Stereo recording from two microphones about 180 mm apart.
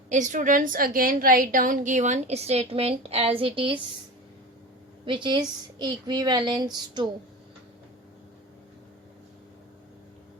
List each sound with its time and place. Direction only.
0.1 s a woman's voice: 45° right (ahead or behind)
5.0 s a woman's voice: 25° right (ahead or behind)